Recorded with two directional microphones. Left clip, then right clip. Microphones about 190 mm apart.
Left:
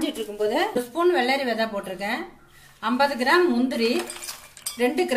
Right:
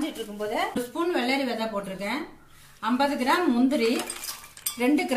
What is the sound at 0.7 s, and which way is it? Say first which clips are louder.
Speech: left 6 dB; 40° left (ahead or behind).